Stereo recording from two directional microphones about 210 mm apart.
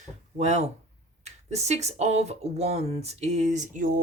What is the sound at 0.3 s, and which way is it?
Speech, 30° right (ahead or behind).